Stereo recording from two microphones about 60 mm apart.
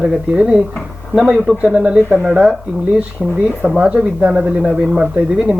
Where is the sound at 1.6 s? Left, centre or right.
Centre.